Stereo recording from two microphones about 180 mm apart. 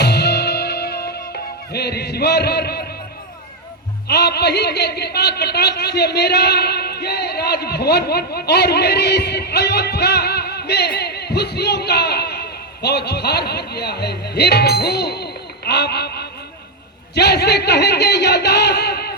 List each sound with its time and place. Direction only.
0.0 s music: 65° left (ahead or behind)
1.7 s speech: 65° left (ahead or behind)
4.1 s a man's voice: 65° left (ahead or behind)